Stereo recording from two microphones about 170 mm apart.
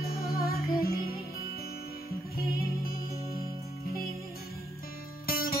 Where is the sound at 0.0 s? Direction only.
60° left (ahead or behind).